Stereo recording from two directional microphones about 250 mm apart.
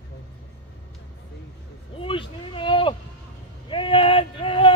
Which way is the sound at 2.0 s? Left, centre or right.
Left.